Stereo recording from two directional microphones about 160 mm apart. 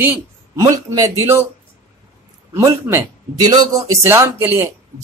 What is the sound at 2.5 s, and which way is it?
Speech, 15° right (ahead or behind).